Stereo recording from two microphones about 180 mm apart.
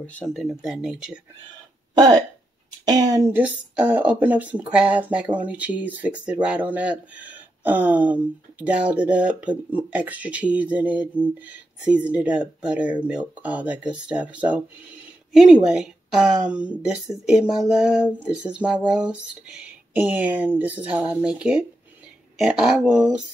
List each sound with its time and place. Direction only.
0.0 s speech: 10° left (ahead or behind)
2.8 s speech: 20° right (ahead or behind)
3.3 s speech: 10° right (ahead or behind)